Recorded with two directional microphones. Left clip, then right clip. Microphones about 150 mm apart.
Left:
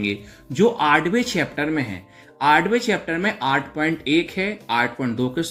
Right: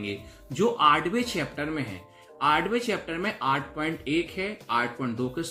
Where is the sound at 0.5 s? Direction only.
Centre (ahead or behind).